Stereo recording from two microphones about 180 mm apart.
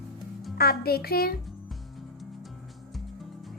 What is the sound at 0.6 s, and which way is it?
Speech, 60° left (ahead or behind).